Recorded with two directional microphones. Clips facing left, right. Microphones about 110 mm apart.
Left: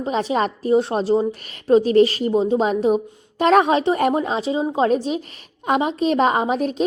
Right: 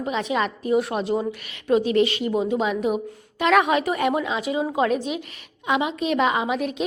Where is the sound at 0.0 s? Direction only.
35° left (ahead or behind).